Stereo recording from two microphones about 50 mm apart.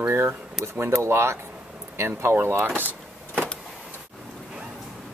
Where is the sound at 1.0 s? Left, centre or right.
Right.